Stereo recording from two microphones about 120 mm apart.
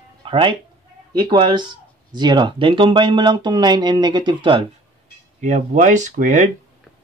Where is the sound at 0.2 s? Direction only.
45° right (ahead or behind).